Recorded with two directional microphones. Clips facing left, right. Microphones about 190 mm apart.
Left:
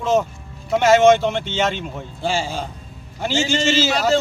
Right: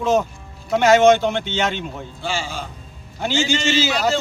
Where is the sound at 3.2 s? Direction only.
Centre (ahead or behind).